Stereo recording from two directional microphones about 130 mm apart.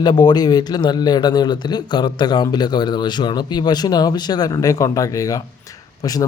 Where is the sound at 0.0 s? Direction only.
35° left (ahead or behind).